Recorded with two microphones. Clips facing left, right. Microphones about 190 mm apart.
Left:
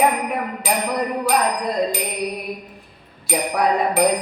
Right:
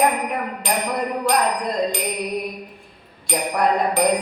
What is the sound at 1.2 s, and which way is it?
Music, 5° left (ahead or behind).